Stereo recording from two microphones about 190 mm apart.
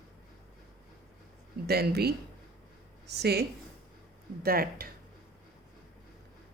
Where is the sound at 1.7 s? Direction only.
55° right (ahead or behind).